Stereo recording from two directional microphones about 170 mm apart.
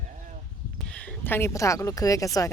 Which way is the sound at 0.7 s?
5° left (ahead or behind).